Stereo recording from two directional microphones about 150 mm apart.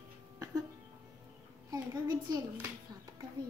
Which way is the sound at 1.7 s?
25° right (ahead or behind).